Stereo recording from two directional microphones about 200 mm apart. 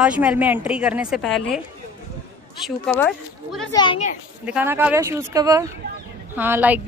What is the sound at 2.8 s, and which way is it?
Speech, 10° left (ahead or behind).